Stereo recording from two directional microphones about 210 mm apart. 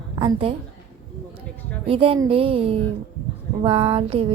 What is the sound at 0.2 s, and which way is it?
Speech, 25° right (ahead or behind).